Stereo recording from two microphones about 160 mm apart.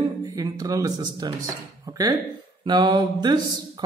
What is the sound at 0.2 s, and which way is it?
Speech, 25° right (ahead or behind).